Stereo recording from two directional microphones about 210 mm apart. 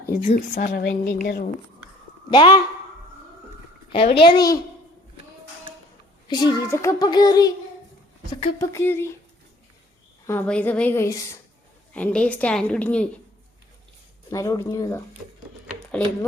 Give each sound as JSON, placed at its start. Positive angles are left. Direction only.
{"t": 0.1, "sound": "speech", "side_deg": 35}
{"t": 2.3, "sound": "a child's voice", "side_deg": 20}
{"t": 3.9, "sound": "a child's voice", "side_deg": 25}
{"t": 6.2, "sound": "a child's voice", "side_deg": 20}
{"t": 10.2, "sound": "a child's voice", "side_deg": 5}
{"t": 14.3, "sound": "a child's voice", "side_deg": 15}
{"t": 15.6, "sound": "a sound", "side_deg": 5}